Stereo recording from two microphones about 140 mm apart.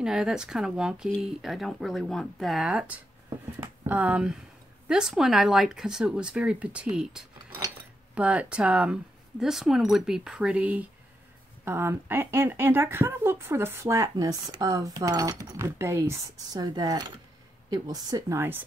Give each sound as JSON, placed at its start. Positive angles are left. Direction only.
{"t": 0.0, "sound": "speech", "side_deg": -5}